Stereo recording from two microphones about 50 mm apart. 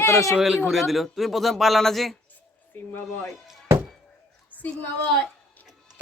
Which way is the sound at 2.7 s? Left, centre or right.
Left.